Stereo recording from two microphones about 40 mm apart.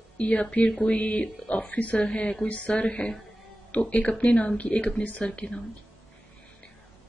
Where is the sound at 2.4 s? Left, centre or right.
Left.